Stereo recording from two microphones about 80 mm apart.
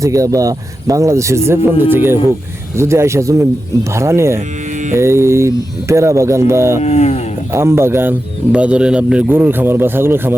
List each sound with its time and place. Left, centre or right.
0.0 s speech: right
8.5 s speech: centre